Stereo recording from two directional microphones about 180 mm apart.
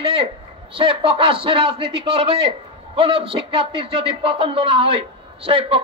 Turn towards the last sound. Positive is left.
turn(degrees=-30)  # may be behind; listen again after turning